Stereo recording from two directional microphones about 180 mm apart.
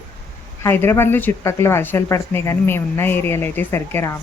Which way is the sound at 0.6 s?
15° left (ahead or behind).